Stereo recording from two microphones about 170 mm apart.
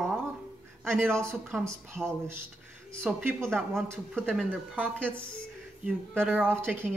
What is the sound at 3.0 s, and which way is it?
Speech, 5° right (ahead or behind).